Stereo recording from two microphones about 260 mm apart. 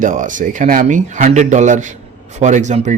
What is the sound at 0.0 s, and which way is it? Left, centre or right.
Speech, right.